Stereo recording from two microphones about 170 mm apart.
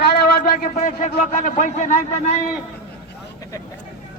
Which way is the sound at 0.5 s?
50° left (ahead or behind).